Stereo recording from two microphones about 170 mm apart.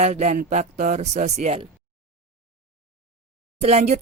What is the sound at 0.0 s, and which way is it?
Speech, 45° right (ahead or behind).